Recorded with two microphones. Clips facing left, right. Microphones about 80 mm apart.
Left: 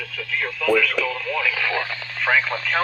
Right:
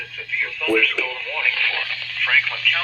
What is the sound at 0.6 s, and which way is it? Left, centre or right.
Speech, centre.